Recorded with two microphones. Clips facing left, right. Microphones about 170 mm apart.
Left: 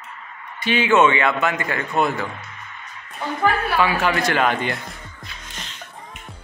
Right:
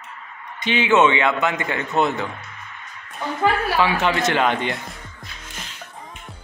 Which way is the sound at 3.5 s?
20° right (ahead or behind).